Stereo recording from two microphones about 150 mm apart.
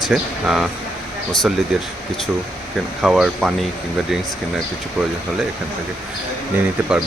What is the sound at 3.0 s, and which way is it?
Speech, centre (ahead or behind).